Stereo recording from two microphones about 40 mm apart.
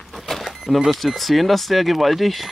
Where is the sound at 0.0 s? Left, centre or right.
Centre.